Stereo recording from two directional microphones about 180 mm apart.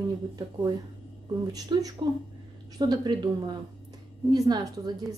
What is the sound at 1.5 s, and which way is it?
A woman's voice, 20° right (ahead or behind).